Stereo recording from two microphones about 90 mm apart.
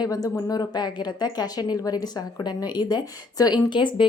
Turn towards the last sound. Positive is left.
turn(degrees=60)  # may be behind; listen again after turning